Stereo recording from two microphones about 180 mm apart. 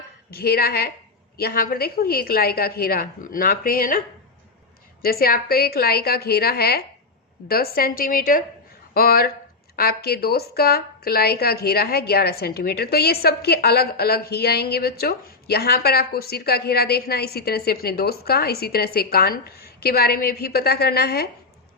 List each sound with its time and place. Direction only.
0.3 s a woman's voice: 60° left (ahead or behind)
5.0 s a woman's voice: 55° left (ahead or behind)